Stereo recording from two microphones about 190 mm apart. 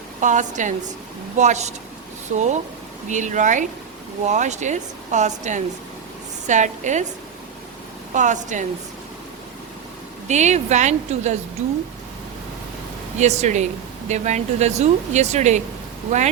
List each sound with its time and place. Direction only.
0.2 s speech: 40° right (ahead or behind)
8.1 s speech: 40° right (ahead or behind)
10.2 s speech: 40° right (ahead or behind)
13.1 s speech: 35° right (ahead or behind)